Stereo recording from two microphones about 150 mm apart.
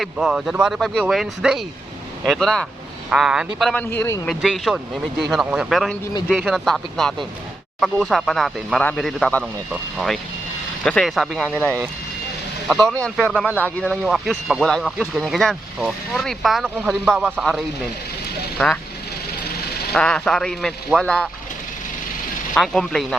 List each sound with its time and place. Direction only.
0.0 s speech: centre (ahead or behind)
3.8 s speech: 15° left (ahead or behind)
4.4 s speech: centre (ahead or behind)
10.8 s speech: 5° left (ahead or behind)
13.0 s speech: 5° left (ahead or behind)
17.3 s speech: 5° left (ahead or behind)
18.6 s speech: 5° left (ahead or behind)
19.9 s speech: 5° left (ahead or behind)
22.5 s speech: 5° left (ahead or behind)